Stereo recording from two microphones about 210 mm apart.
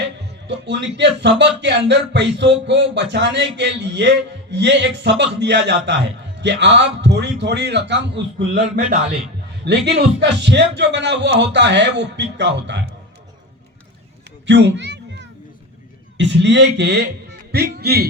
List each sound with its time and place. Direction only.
0.4 s speech: 55° right (ahead or behind)
14.4 s cat: 55° right (ahead or behind)
16.1 s a man's voice: 55° right (ahead or behind)